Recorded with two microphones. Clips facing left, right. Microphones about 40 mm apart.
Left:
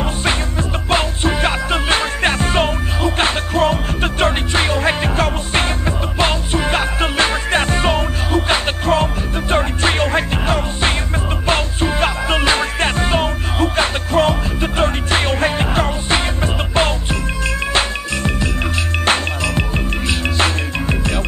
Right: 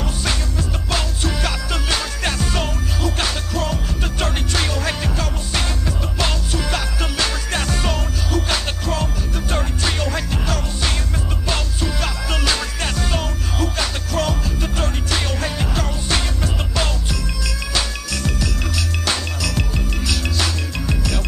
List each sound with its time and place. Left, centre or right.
0.0 s music: left